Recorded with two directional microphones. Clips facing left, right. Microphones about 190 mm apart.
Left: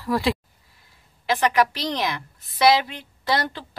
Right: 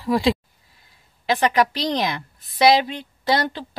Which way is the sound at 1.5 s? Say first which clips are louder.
Right 2 dB; 20° right (ahead or behind).